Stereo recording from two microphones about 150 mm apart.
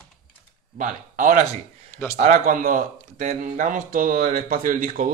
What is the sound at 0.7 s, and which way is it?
Speech, 65° right (ahead or behind).